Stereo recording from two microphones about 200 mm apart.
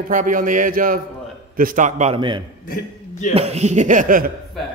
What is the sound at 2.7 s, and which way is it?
Speech, 40° left (ahead or behind).